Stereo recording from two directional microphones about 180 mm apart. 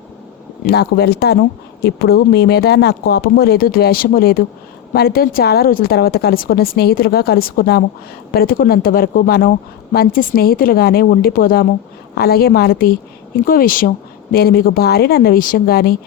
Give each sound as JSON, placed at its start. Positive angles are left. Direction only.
{"t": 0.6, "sound": "speech", "side_deg": 65}